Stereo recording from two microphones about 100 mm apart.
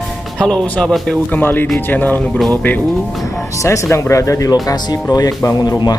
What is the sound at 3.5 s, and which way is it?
Speech, 30° left (ahead or behind).